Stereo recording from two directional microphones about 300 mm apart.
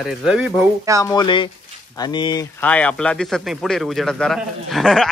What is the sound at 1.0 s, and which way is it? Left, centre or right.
Speech, centre.